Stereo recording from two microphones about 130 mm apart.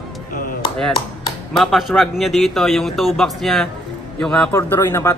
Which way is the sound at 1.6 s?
Centre (ahead or behind).